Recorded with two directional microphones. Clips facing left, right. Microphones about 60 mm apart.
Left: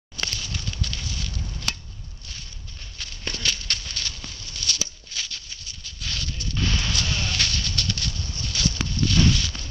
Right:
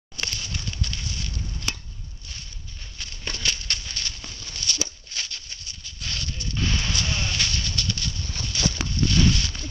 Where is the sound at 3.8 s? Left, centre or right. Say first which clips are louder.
Left 1 dB; right.